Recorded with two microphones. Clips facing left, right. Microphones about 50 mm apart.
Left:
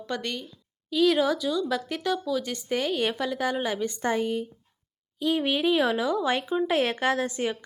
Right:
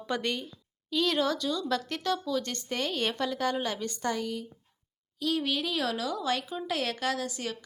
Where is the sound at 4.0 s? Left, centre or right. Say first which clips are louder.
Left 5 dB; left.